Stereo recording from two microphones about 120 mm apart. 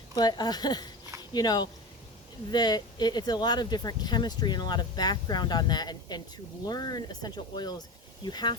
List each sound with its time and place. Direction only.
0.2 s speech: 35° left (ahead or behind)